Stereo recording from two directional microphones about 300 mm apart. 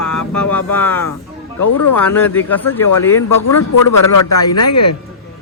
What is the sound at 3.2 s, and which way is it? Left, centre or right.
A man's voice, left.